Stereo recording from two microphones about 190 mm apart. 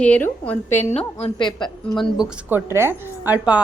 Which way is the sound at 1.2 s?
25° left (ahead or behind).